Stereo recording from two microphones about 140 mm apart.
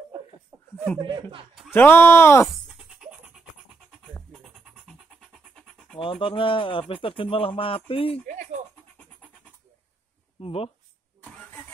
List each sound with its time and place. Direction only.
0.5 s chuckle: 20° right (ahead or behind)
1.7 s speech: 15° left (ahead or behind)
6.2 s speech: 40° left (ahead or behind)
8.3 s bleat: 60° right (ahead or behind)
10.4 s speech: 45° left (ahead or behind)
11.2 s vehicle: 10° left (ahead or behind)